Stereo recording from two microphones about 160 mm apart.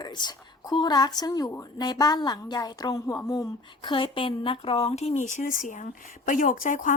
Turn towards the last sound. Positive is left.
turn(degrees=55)  # may be behind; listen again after turning